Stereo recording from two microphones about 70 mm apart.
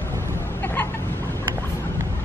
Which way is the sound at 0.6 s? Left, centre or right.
Left.